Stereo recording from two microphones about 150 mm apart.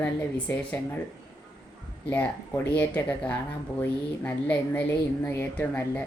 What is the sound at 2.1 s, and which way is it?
Speech, 10° left (ahead or behind).